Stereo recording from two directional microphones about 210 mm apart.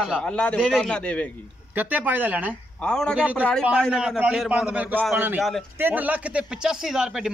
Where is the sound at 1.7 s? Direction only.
10° right (ahead or behind).